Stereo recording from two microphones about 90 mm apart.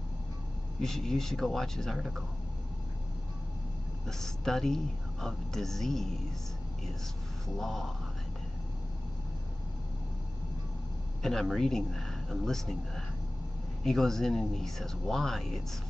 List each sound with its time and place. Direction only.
0.7 s speech: 5° left (ahead or behind)
4.2 s speech: 5° left (ahead or behind)
7.5 s speech: centre (ahead or behind)
11.2 s speech: centre (ahead or behind)